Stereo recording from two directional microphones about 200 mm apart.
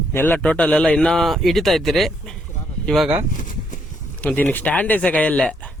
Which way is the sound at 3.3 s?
40° left (ahead or behind).